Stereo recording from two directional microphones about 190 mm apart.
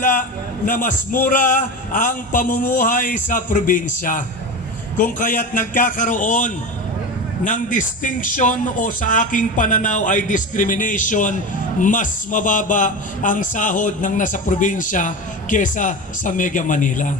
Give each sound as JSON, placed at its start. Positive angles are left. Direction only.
{"t": 0.0, "sound": "a man's voice", "side_deg": 45}